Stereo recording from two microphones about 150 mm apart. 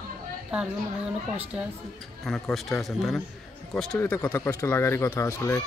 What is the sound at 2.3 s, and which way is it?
Speech, centre (ahead or behind).